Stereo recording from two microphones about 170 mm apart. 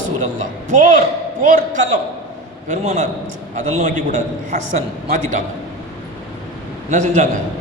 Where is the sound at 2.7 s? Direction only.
40° right (ahead or behind).